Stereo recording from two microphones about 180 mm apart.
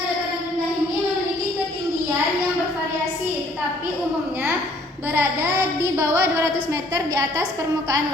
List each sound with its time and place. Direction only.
6.0 s a woman's voice: 15° right (ahead or behind)